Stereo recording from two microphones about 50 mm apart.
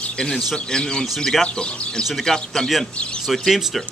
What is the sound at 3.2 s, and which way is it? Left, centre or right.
Speech, centre.